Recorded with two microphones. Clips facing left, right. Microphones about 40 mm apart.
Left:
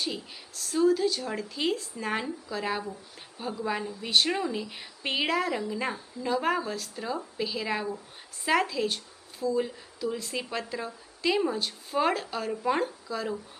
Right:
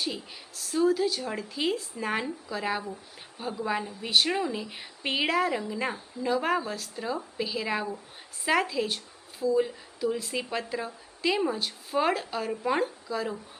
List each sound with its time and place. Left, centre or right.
0.0 s speech: centre